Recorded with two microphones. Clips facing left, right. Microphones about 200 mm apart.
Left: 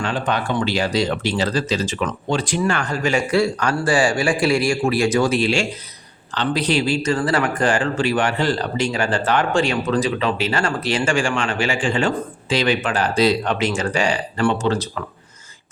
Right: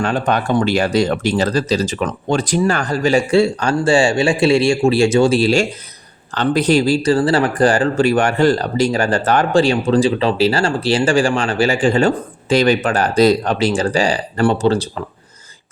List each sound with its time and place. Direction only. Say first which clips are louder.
0.0 s a man's voice: right 5 dB; 45° right (ahead or behind); by 15.0 s 30° right (ahead or behind)